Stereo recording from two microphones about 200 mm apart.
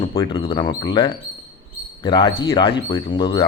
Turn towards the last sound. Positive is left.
turn(degrees=25)  # may be behind; listen again after turning